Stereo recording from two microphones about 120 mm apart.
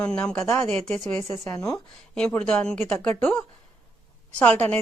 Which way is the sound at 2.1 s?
10° left (ahead or behind).